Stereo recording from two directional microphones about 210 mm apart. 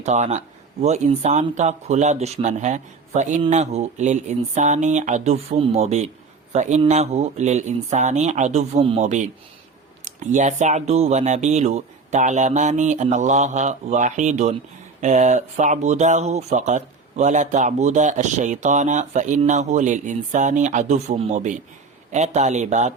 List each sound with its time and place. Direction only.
0.0 s speech: 35° right (ahead or behind)